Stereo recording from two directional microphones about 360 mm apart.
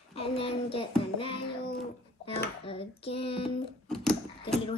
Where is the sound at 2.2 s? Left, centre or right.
Centre.